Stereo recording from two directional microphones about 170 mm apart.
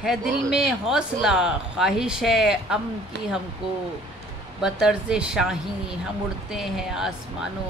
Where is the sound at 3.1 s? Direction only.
85° right.